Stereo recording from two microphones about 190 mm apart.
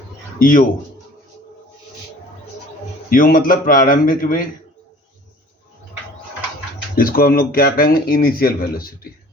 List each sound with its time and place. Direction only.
0.3 s speech: 45° left (ahead or behind)
3.1 s speech: 45° left (ahead or behind)
6.9 s speech: 50° left (ahead or behind)